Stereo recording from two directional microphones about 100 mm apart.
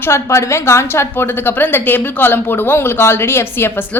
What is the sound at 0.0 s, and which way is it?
A woman's voice, 25° left (ahead or behind).